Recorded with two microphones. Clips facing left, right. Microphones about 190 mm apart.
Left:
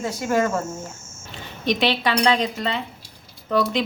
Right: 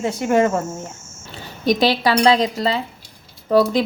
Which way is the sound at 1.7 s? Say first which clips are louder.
Right 4 dB; 40° right (ahead or behind).